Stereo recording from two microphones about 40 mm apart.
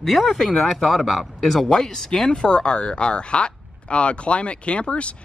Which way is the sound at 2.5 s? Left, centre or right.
Left.